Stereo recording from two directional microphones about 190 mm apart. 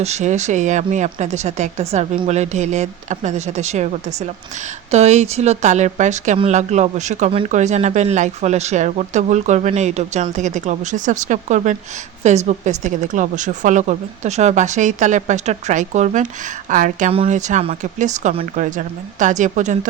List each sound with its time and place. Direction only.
0.0 s speech: 35° right (ahead or behind)
4.9 s a woman's voice: 35° right (ahead or behind)